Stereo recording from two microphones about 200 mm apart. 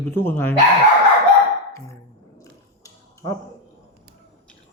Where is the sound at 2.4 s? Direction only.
15° left (ahead or behind).